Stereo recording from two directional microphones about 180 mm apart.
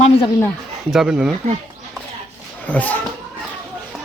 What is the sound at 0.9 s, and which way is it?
Speech, 5° right (ahead or behind).